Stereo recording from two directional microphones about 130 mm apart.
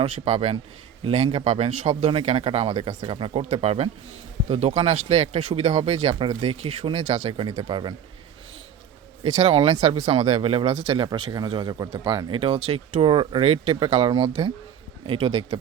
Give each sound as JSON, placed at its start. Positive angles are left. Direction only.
{"t": 0.0, "sound": "speech", "side_deg": -55}
{"t": 3.4, "sound": "speech", "side_deg": -55}
{"t": 9.2, "sound": "speech", "side_deg": -50}